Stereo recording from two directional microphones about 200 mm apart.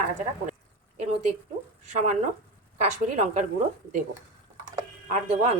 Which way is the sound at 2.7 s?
35° right (ahead or behind).